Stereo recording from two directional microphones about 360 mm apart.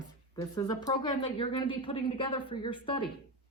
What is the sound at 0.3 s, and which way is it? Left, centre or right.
A woman's voice, centre.